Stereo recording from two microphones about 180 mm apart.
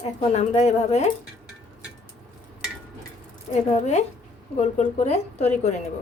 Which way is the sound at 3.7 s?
40° left (ahead or behind).